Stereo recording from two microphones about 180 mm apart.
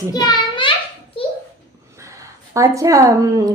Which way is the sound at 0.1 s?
25° left (ahead or behind).